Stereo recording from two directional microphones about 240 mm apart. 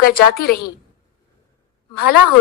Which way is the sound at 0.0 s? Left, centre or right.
Left.